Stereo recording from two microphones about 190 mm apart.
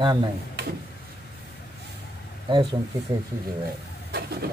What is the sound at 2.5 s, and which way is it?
Speech, 25° right (ahead or behind).